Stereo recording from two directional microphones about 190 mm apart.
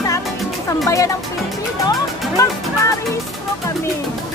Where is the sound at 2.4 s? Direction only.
15° left (ahead or behind).